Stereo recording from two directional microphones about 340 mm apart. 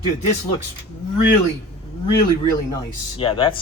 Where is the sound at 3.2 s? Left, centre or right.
Centre.